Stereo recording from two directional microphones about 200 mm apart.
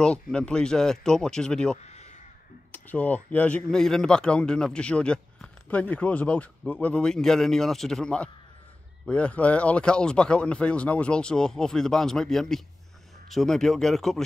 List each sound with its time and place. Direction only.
0.0 s speech: 5° left (ahead or behind)
1.8 s a sound: 35° left (ahead or behind)
2.7 s speech: 10° left (ahead or behind)